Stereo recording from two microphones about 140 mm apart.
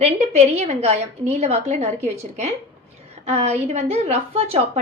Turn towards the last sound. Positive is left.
turn(degrees=-45)  # may be behind; listen again after turning